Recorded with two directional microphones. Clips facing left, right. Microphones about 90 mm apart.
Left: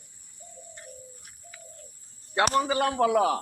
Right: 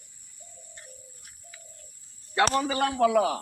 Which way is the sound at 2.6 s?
15° left (ahead or behind).